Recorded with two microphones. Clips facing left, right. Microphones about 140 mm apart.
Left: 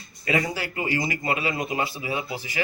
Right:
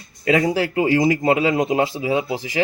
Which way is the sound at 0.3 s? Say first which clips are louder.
Right 8 dB; 90° right.